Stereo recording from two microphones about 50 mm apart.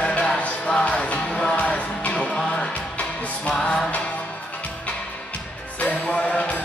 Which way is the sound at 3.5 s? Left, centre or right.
Centre.